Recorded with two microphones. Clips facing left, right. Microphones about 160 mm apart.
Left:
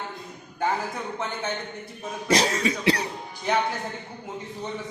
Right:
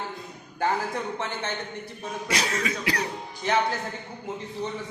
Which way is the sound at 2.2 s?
35° left (ahead or behind).